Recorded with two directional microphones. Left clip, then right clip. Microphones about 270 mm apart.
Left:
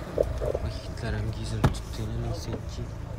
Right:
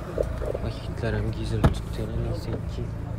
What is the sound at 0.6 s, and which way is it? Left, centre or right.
Speech, centre.